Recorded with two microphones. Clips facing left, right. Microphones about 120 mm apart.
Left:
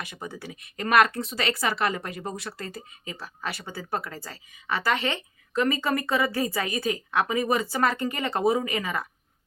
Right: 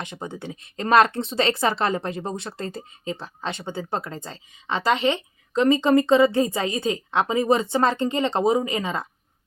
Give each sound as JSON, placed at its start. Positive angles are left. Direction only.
{"t": 0.0, "sound": "speech", "side_deg": -25}